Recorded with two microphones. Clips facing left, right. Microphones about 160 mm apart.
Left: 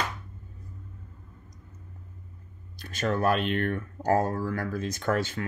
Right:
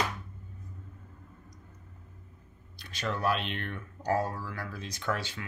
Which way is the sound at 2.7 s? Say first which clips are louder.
Left 7 dB; 45° left (ahead or behind).